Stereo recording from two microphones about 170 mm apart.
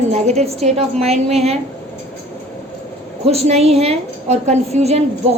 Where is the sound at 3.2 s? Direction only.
40° right (ahead or behind).